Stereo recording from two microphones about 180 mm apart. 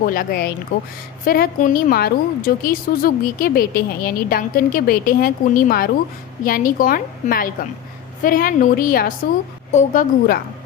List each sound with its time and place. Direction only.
0.0 s a woman's voice: 50° left (ahead or behind)